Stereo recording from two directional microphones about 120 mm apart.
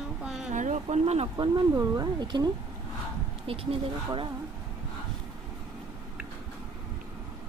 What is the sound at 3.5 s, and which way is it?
Speech, 50° right (ahead or behind).